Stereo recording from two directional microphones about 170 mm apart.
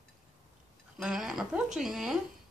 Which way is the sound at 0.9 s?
Centre (ahead or behind).